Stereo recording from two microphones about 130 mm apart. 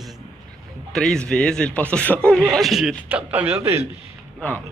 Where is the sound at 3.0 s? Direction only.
10° right (ahead or behind).